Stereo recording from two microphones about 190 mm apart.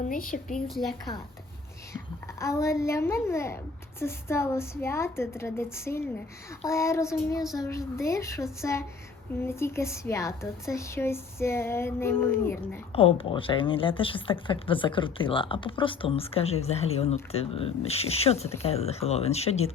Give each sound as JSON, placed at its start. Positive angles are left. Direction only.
{"t": 0.0, "sound": "a woman's voice", "side_deg": 45}
{"t": 0.4, "sound": "a woman's voice", "side_deg": 0}
{"t": 2.4, "sound": "speech", "side_deg": 15}
{"t": 12.9, "sound": "a woman's voice", "side_deg": 30}